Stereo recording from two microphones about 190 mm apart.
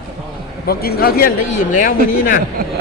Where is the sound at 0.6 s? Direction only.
55° left (ahead or behind).